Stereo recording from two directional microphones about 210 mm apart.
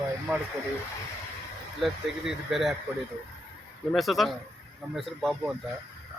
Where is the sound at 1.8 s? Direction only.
Centre (ahead or behind).